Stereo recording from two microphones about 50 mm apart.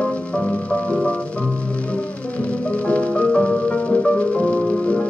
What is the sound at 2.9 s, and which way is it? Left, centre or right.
Music, left.